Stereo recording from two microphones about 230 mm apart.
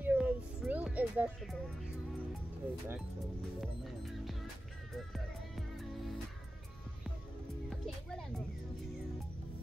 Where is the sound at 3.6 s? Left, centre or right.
Centre.